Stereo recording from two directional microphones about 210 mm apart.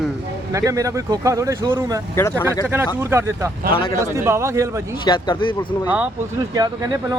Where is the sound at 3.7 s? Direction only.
25° left (ahead or behind).